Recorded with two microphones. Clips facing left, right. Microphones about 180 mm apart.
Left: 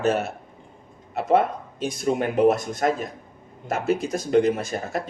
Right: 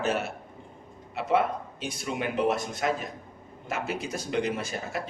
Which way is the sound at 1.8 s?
45° left (ahead or behind).